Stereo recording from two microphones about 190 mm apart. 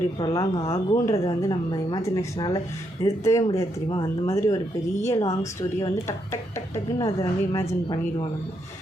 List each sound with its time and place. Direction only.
0.6 s speech: 30° left (ahead or behind)
1.0 s speech: 20° left (ahead or behind)